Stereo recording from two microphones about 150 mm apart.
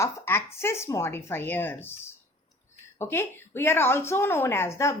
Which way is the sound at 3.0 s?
15° left (ahead or behind).